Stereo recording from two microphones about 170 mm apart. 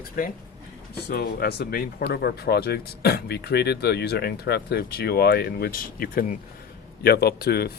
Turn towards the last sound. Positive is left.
turn(degrees=70)  # may be behind; listen again after turning